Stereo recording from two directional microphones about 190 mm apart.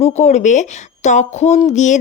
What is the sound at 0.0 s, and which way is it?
Speech, 35° left (ahead or behind).